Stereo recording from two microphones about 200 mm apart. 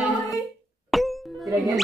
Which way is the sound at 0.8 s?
Centre (ahead or behind).